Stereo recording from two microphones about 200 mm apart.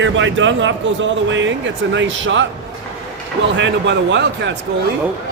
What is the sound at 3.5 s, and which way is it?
Speech, 65° right (ahead or behind).